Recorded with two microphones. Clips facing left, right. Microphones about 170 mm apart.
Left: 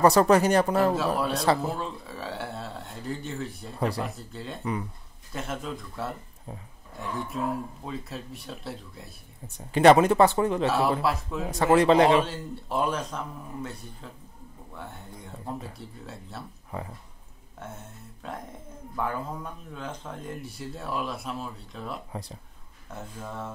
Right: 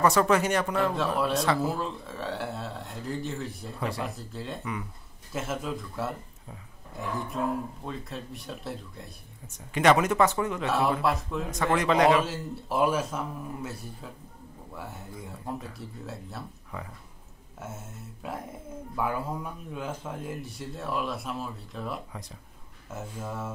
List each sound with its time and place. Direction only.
0.0 s speech: 35° left (ahead or behind)
0.9 s speech: centre (ahead or behind)
9.7 s speech: 35° left (ahead or behind)
11.0 s speech: centre (ahead or behind)
11.5 s speech: 30° left (ahead or behind)
12.3 s speech: 5° right (ahead or behind)
16.7 s speech: 30° left (ahead or behind)
17.6 s speech: 5° right (ahead or behind)